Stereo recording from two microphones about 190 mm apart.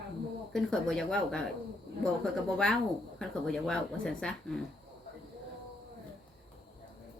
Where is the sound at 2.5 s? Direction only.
5° left (ahead or behind).